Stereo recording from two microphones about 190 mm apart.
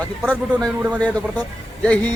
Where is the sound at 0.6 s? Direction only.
10° right (ahead or behind).